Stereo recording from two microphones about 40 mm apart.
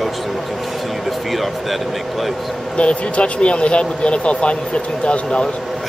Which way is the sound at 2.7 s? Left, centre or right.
Left.